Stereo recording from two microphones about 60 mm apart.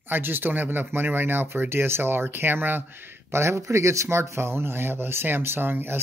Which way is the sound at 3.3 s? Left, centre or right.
Right.